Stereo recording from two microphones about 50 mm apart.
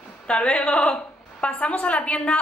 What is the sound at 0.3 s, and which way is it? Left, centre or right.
A woman's voice, left.